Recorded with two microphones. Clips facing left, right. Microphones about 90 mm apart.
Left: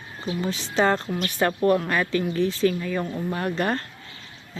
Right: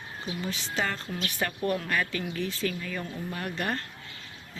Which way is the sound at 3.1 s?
45° left (ahead or behind).